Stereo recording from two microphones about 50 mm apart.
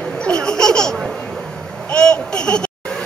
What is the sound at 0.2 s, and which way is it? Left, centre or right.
Laughter, centre.